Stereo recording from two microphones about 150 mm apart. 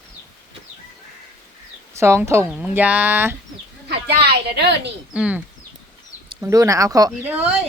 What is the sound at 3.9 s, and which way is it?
Speech, 90° right.